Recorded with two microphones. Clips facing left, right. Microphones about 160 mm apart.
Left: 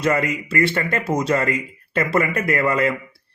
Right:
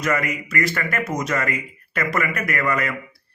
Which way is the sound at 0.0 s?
30° left (ahead or behind).